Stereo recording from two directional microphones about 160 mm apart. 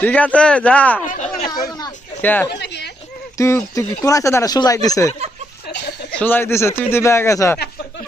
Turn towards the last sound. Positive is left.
turn(degrees=20)  # may be behind; listen again after turning